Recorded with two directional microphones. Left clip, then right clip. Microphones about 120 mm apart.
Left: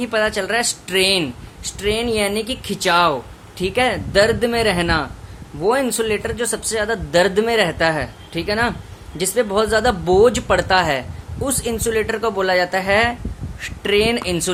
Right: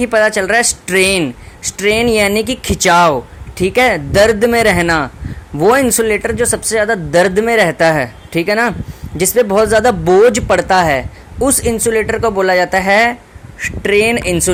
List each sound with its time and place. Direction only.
0.0 s speech: 55° right (ahead or behind)
3.6 s speech: 55° right (ahead or behind)
5.5 s speech: 85° right; by 11.7 s 55° right (ahead or behind)
11.7 s speech: 40° right (ahead or behind)
13.6 s a woman's voice: 35° right (ahead or behind)